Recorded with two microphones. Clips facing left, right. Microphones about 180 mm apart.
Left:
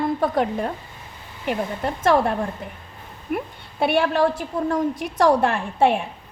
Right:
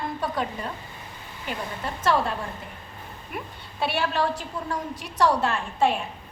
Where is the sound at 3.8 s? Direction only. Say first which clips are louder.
Left 7 dB; 50° left (ahead or behind).